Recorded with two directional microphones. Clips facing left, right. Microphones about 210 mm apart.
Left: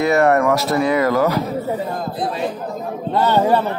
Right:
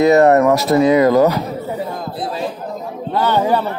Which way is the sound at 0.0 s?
20° right (ahead or behind).